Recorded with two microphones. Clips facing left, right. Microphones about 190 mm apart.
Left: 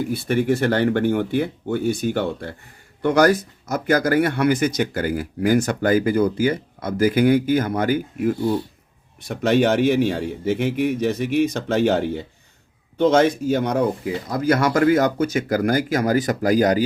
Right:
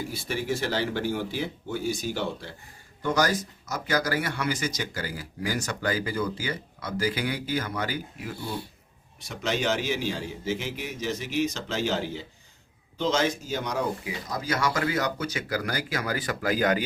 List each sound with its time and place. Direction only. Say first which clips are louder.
0.0 s a man's voice: left 10 dB; 55° left (ahead or behind); by 16.8 s 40° left (ahead or behind)